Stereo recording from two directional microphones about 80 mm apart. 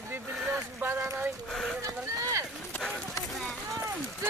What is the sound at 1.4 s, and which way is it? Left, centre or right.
Speech, centre.